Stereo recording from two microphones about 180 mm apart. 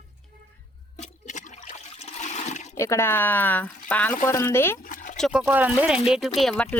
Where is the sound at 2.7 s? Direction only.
15° left (ahead or behind).